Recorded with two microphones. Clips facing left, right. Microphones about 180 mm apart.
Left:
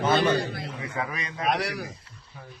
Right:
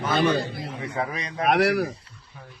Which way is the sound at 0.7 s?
30° right (ahead or behind).